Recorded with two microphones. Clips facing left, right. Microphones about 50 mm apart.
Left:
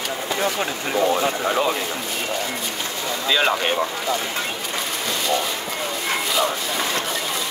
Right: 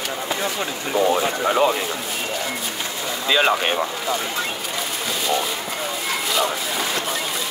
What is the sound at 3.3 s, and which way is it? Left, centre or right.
Speech, centre.